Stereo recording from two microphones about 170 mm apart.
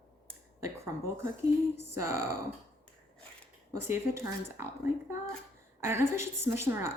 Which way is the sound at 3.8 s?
15° right (ahead or behind).